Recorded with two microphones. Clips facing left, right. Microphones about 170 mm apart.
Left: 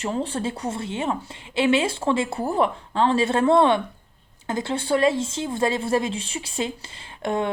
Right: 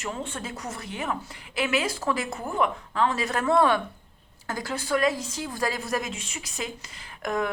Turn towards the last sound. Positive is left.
turn(degrees=30)  # may be behind; listen again after turning